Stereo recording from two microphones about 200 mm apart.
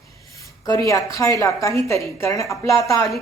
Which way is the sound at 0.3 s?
15° left (ahead or behind).